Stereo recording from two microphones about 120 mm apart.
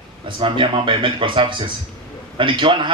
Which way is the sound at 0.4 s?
45° right (ahead or behind).